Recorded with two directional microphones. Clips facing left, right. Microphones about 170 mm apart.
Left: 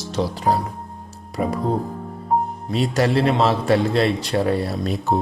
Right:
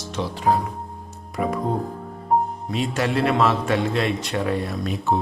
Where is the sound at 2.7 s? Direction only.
35° left (ahead or behind).